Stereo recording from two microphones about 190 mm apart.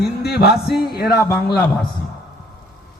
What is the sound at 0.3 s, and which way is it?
Music, 60° left (ahead or behind).